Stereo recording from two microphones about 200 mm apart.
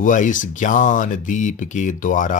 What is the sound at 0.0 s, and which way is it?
Speech, 40° left (ahead or behind).